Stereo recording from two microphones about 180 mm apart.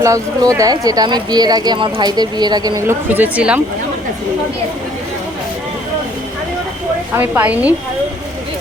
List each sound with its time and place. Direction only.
0.0 s speech: 15° right (ahead or behind)
7.2 s a woman's voice: 10° right (ahead or behind)